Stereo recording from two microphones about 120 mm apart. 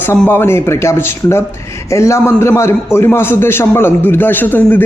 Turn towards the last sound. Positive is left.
turn(degrees=15)  # may be behind; listen again after turning